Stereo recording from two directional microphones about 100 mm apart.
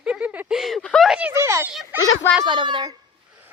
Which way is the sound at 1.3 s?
25° right (ahead or behind).